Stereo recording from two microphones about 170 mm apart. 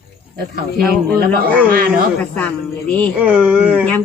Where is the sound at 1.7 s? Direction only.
55° right (ahead or behind).